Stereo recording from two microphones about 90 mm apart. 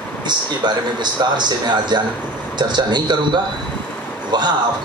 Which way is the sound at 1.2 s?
55° right (ahead or behind).